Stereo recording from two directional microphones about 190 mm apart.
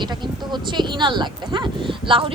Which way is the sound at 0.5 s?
25° right (ahead or behind).